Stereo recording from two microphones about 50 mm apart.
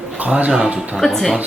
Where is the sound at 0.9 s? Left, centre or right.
Centre.